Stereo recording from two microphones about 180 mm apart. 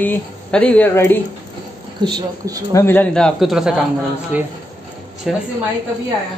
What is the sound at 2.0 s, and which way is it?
Speech, 20° right (ahead or behind).